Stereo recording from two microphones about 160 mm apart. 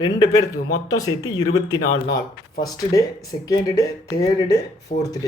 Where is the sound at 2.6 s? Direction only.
25° left (ahead or behind).